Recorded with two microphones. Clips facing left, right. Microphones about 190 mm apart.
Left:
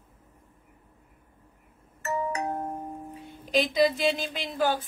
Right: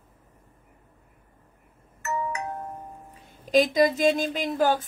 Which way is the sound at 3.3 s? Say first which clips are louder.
Right 5 dB; 45° right (ahead or behind).